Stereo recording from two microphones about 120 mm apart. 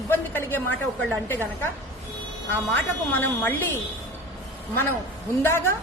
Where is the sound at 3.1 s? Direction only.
15° left (ahead or behind).